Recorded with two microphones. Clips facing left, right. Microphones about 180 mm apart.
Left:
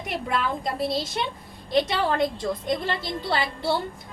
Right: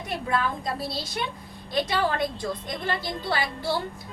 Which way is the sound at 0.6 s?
20° left (ahead or behind).